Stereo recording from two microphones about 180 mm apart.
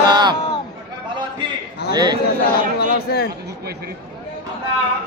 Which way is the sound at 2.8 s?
60° left (ahead or behind).